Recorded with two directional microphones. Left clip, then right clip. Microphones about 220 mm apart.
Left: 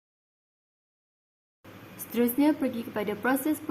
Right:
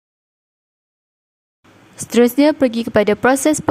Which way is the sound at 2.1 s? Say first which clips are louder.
Right 13 dB; 45° right (ahead or behind).